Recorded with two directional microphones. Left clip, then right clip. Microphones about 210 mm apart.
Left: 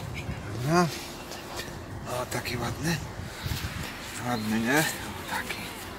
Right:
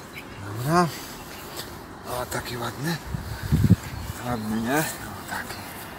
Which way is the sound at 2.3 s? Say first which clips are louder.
Right 2 dB; 5° left (ahead or behind).